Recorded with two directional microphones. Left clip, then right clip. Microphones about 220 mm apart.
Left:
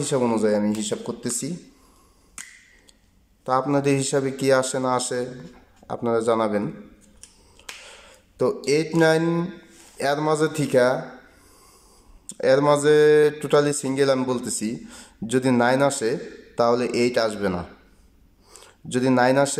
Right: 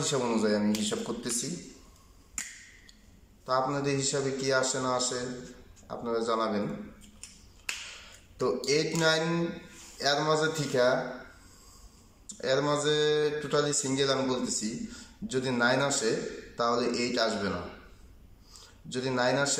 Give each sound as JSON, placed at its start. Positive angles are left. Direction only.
{"t": 0.0, "sound": "speech", "side_deg": 30}
{"t": 3.4, "sound": "speech", "side_deg": 35}
{"t": 5.9, "sound": "speech", "side_deg": 35}
{"t": 8.6, "sound": "speech", "side_deg": 30}
{"t": 12.4, "sound": "speech", "side_deg": 35}